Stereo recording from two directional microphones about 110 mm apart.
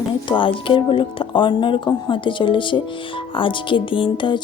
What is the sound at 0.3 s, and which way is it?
Speech, 50° left (ahead or behind).